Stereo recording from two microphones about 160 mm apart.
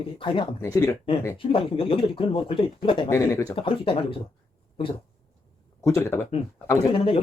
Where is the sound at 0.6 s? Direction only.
20° left (ahead or behind).